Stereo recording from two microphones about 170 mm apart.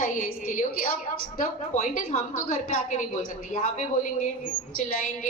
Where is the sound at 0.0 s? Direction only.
50° left (ahead or behind).